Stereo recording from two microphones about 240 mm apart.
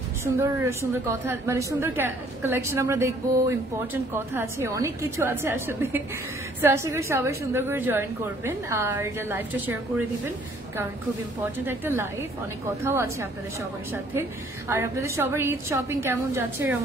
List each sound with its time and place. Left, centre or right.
0.2 s a woman's voice: centre
11.4 s a woman's voice: centre
14.7 s a woman's voice: centre